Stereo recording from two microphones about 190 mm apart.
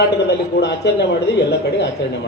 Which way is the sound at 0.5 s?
65° left (ahead or behind).